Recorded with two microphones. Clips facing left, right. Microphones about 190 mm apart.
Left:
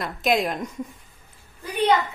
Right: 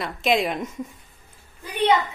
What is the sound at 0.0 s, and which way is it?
Speech, centre (ahead or behind).